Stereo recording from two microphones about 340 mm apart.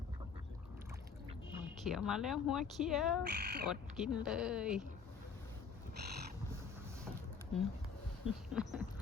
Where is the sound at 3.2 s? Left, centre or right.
Right.